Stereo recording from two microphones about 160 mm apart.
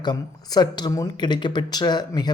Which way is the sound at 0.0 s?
25° left (ahead or behind).